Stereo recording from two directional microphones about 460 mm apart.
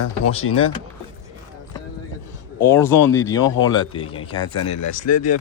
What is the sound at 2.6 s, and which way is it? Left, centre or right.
Speech, centre.